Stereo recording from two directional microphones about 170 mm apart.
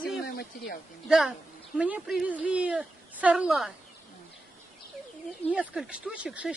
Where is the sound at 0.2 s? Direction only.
65° left (ahead or behind).